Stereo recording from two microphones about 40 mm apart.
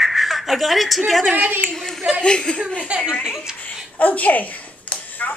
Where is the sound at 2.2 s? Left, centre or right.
Left.